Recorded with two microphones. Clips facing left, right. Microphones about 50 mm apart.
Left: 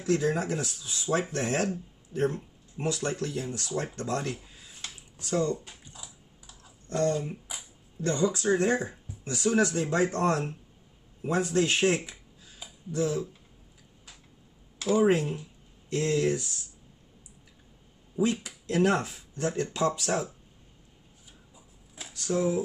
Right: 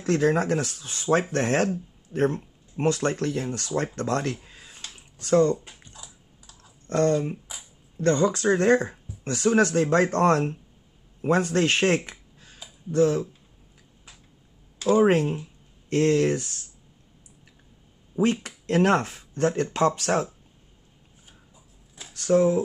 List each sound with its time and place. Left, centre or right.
0.0 s speech: right
5.9 s computer keyboard: centre
6.9 s speech: right
14.9 s speech: right
18.1 s speech: right
22.1 s speech: right